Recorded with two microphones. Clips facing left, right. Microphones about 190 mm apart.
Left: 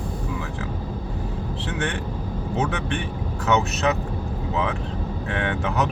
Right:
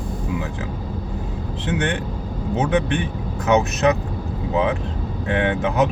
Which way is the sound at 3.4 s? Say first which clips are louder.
Right 4 dB; 15° right (ahead or behind).